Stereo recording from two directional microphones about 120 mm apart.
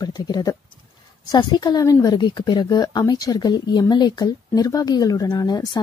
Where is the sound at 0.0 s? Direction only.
35° left (ahead or behind).